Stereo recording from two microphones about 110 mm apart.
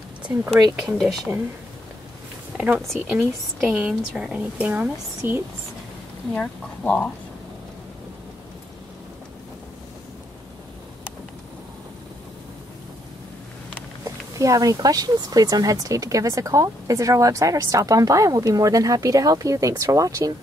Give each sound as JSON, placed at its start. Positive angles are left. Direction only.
{"t": 0.5, "sound": "speech", "side_deg": 0}
{"t": 2.5, "sound": "speech", "side_deg": -10}
{"t": 6.3, "sound": "speech", "side_deg": 10}
{"t": 14.0, "sound": "speech", "side_deg": -30}